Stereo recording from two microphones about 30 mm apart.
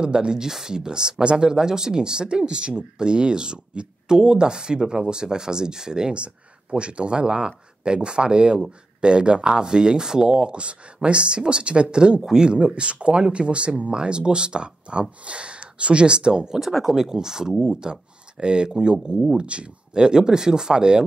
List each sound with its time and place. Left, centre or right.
0.0 s speech: right
6.1 s speech: right
13.9 s speech: right
16.5 s speech: centre
17.1 s speech: centre